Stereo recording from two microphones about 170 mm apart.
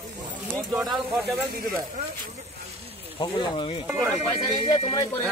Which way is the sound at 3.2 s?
25° left (ahead or behind).